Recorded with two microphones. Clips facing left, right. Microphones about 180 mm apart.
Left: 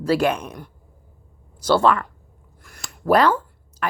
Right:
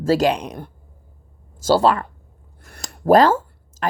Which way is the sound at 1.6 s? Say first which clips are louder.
Right 1 dB; 35° right (ahead or behind).